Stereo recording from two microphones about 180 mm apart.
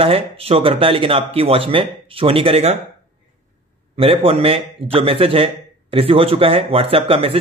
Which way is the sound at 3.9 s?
30° right (ahead or behind).